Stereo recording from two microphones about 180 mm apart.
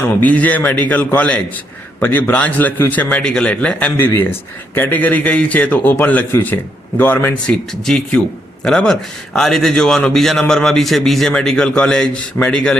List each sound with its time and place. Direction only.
0.2 s a man's voice: 10° left (ahead or behind)